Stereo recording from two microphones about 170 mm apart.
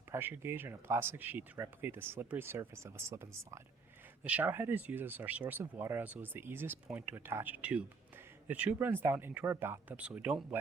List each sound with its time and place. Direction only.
0.1 s speech: 15° right (ahead or behind)